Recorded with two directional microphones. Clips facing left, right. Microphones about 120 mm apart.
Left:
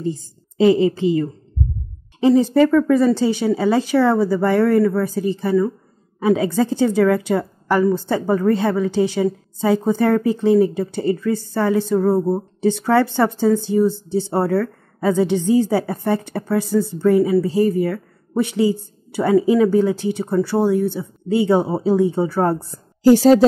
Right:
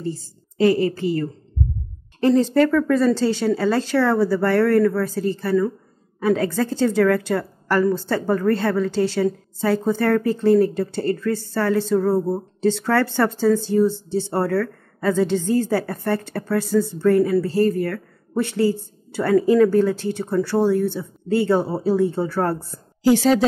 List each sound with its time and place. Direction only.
0.0 s a woman's voice: 20° left (ahead or behind)
23.0 s a woman's voice: 40° left (ahead or behind)